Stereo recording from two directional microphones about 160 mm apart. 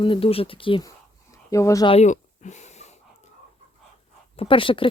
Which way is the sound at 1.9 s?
45° left (ahead or behind).